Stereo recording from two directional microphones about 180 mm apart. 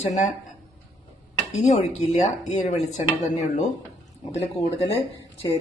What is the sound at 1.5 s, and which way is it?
Speech, 40° left (ahead or behind).